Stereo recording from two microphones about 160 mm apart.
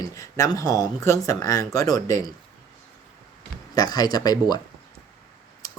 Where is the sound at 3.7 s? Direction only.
25° left (ahead or behind).